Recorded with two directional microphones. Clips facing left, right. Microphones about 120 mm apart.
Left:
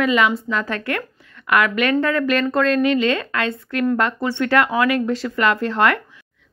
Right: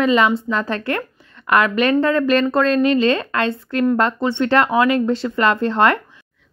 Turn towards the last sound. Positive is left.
turn(degrees=-30)  # may be behind; listen again after turning